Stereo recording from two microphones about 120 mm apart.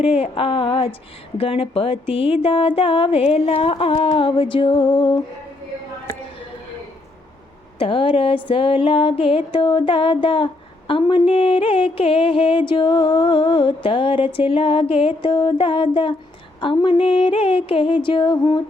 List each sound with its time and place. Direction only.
0.1 s music: 50° left (ahead or behind)
7.8 s music: 50° left (ahead or behind)